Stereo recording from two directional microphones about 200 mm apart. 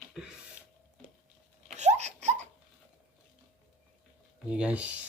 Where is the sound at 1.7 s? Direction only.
35° right (ahead or behind).